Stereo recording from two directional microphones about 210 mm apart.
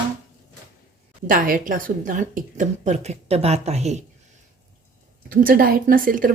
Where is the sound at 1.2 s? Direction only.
40° right (ahead or behind).